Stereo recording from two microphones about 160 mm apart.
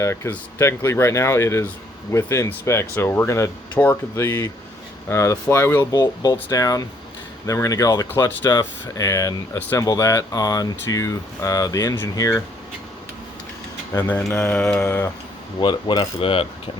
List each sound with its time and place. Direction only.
0.0 s speech: 15° left (ahead or behind)
13.9 s speech: 10° left (ahead or behind)
15.6 s mechanisms: 30° left (ahead or behind)